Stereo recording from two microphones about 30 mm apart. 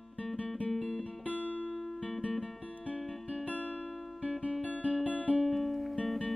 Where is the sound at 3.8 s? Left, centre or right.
Centre.